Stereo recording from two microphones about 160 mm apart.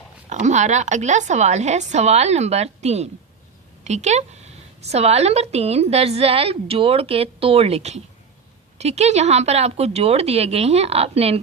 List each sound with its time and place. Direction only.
0.3 s a woman's voice: 50° right (ahead or behind)